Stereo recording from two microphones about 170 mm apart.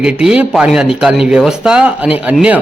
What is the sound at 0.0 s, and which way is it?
Speech, 5° right (ahead or behind).